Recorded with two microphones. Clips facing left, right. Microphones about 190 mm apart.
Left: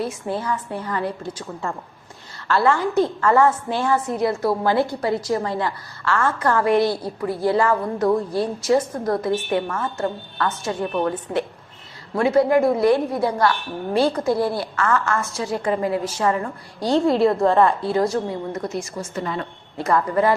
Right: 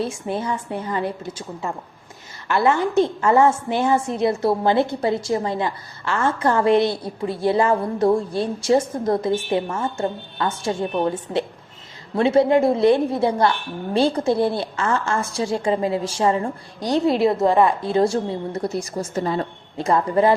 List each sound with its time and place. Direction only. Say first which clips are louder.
0.0 s a woman's voice: right 1 dB; 25° right (ahead or behind)